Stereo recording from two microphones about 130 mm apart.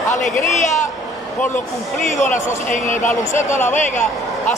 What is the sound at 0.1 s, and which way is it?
Speech, 75° left (ahead or behind).